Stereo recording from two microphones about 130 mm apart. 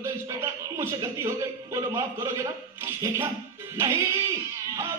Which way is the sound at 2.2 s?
20° right (ahead or behind).